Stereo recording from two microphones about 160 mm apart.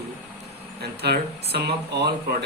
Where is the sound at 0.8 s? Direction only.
90° right.